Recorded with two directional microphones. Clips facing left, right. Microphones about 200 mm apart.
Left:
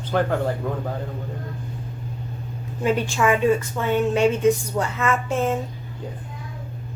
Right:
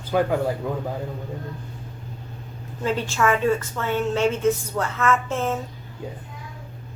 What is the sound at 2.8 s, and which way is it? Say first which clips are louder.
A woman's voice: left 2 dB; 15° left (ahead or behind).